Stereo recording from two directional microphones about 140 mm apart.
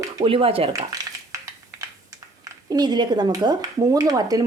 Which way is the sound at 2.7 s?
30° right (ahead or behind).